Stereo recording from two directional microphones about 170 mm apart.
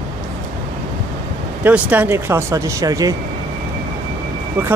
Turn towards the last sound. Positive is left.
turn(degrees=-15)  # may be behind; listen again after turning